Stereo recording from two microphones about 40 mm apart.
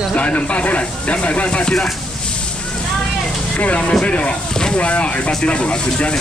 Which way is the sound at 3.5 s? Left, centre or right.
Left.